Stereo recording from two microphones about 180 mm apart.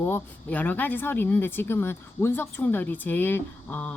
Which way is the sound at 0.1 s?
10° left (ahead or behind).